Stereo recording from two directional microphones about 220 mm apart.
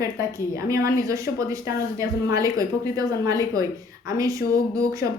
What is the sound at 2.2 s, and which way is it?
A woman's voice, 15° right (ahead or behind).